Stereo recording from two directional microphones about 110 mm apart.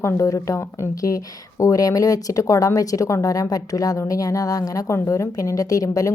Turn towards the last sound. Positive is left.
turn(degrees=30)  # may be behind; listen again after turning